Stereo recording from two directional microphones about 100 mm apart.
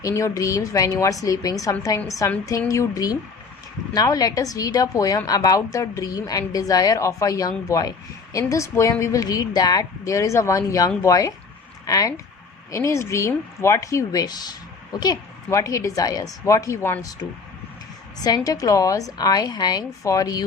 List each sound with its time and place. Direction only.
0.0 s a woman's voice: 35° left (ahead or behind)
15.4 s a woman's voice: 30° left (ahead or behind)
17.0 s a woman's voice: 40° left (ahead or behind)